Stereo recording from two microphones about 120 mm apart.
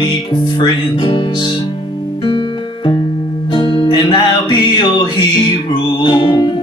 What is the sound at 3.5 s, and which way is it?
Music, 45° left (ahead or behind).